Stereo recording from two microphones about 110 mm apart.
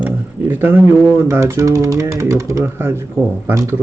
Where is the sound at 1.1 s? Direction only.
25° right (ahead or behind).